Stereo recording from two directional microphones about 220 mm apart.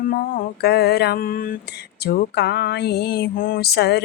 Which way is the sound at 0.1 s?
40° left (ahead or behind).